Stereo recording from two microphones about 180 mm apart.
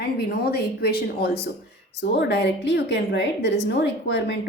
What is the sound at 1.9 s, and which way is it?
A woman's voice, 70° left (ahead or behind).